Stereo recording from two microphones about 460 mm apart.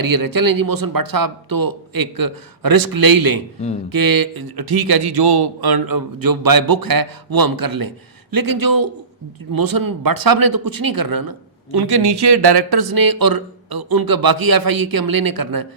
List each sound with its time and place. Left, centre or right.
0.0 s speech: right